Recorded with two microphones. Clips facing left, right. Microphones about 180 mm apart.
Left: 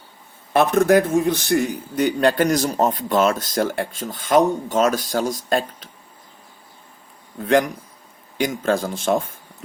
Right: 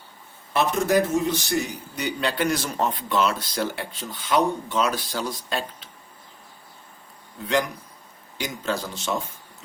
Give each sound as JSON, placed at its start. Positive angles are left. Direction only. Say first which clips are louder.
{"t": 0.5, "sound": "a man's voice", "louder": "left 6 dB", "side_deg": 55}
{"t": 7.4, "sound": "a man's voice", "louder": "left 6 dB", "side_deg": 50}